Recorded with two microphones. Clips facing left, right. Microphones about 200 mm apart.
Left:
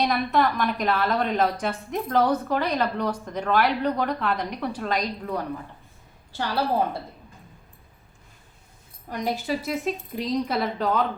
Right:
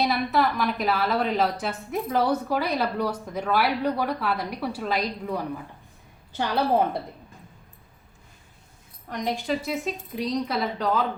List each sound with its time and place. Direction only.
0.0 s a woman's voice: 5° right (ahead or behind)
6.3 s a woman's voice: 20° right (ahead or behind)
9.0 s speech: 5° left (ahead or behind)